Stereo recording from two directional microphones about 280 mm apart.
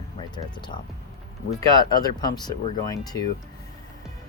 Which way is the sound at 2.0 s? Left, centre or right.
Centre.